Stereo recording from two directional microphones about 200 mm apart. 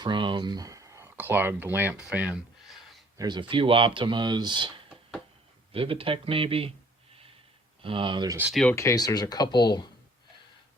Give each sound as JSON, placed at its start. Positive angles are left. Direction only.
{"t": 0.0, "sound": "speech", "side_deg": -25}
{"t": 2.0, "sound": "a sound", "side_deg": -5}
{"t": 3.2, "sound": "speech", "side_deg": -20}
{"t": 7.8, "sound": "speech", "side_deg": -25}
{"t": 8.4, "sound": "speech", "side_deg": -5}
{"t": 8.6, "sound": "speech", "side_deg": 15}